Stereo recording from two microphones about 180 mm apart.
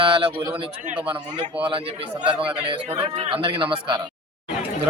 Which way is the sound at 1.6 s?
30° right (ahead or behind).